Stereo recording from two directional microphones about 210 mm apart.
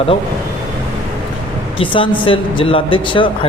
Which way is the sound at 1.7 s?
25° left (ahead or behind).